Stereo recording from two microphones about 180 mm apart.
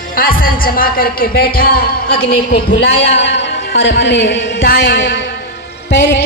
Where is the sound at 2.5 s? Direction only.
75° left (ahead or behind).